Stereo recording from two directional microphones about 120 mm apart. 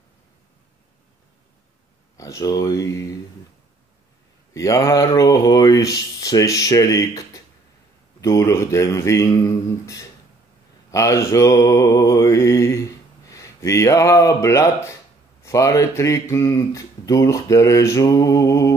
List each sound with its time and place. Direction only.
2.1 s speech: 30° left (ahead or behind)
4.6 s speech: 25° left (ahead or behind)
10.9 s mantra: 25° left (ahead or behind)
15.4 s speech: 25° left (ahead or behind)